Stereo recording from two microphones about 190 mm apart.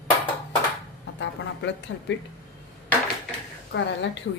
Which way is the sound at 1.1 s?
70° left (ahead or behind).